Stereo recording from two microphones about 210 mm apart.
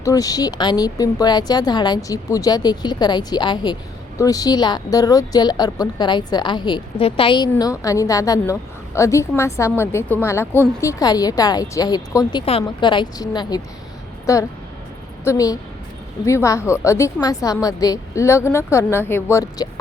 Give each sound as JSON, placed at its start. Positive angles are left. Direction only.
{"t": 0.0, "sound": "a woman's voice", "side_deg": 15}